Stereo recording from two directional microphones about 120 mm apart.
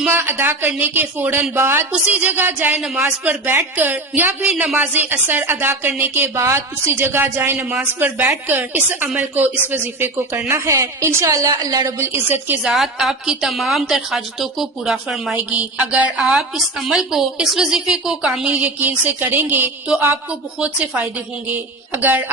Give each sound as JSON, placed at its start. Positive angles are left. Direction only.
{"t": 0.0, "sound": "a woman's voice", "side_deg": -15}
{"t": 12.6, "sound": "a woman's voice", "side_deg": 0}